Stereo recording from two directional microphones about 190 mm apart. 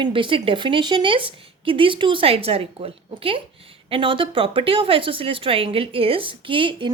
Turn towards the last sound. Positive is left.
turn(degrees=-25)  # may be behind; listen again after turning